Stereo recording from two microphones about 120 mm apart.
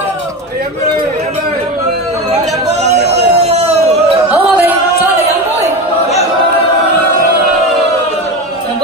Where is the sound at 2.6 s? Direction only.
65° right (ahead or behind).